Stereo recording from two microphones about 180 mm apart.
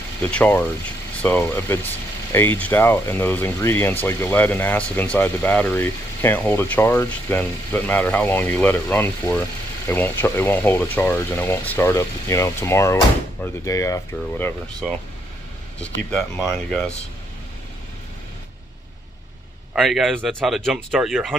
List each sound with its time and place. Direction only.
0.2 s speech: 10° left (ahead or behind)
15.8 s speech: 5° left (ahead or behind)
19.7 s a man's voice: centre (ahead or behind)